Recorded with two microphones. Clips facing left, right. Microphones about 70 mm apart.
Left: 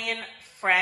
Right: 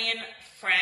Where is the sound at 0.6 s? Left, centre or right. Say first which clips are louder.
Left 4 dB; centre.